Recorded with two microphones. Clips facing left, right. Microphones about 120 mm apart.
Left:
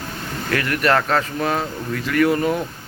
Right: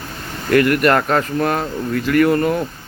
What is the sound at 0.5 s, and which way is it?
Speech, 5° right (ahead or behind).